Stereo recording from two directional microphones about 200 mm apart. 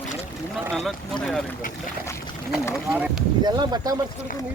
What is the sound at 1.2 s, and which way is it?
Speech, 5° left (ahead or behind).